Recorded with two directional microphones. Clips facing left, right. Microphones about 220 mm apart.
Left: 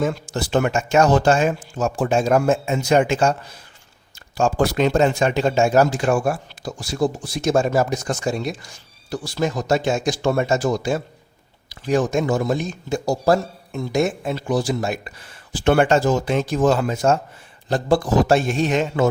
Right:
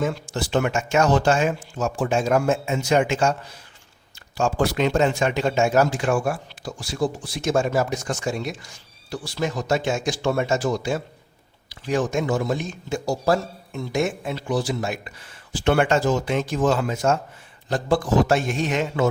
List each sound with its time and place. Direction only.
0.0 s a man's voice: 40° left (ahead or behind)
4.4 s a man's voice: 40° left (ahead or behind)